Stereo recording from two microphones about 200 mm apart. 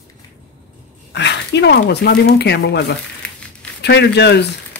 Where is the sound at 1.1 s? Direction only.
60° left (ahead or behind).